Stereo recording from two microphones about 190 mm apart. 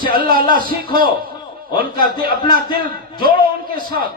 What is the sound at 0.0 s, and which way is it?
Speech, 50° right (ahead or behind).